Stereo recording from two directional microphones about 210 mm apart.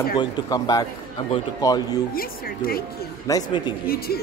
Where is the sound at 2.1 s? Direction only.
45° left (ahead or behind).